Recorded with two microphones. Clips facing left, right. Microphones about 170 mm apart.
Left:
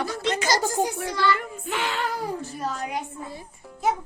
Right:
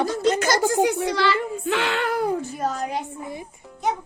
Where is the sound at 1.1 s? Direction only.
80° right; by 2.8 s 50° right (ahead or behind).